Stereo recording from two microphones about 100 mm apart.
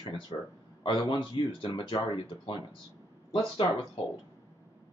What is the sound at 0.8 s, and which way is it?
Speech, 55° left (ahead or behind).